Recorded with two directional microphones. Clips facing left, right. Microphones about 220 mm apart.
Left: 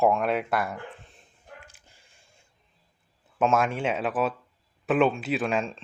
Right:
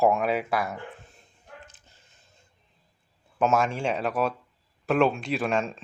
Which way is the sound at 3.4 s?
Centre (ahead or behind).